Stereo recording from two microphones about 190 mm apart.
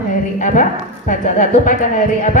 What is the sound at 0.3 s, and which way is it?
A woman's voice, 40° left (ahead or behind).